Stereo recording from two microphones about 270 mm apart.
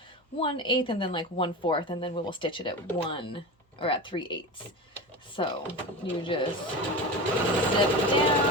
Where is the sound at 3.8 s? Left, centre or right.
Centre.